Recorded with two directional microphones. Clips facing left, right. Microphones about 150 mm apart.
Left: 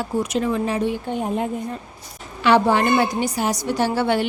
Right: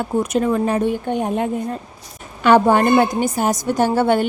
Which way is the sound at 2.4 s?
50° right (ahead or behind).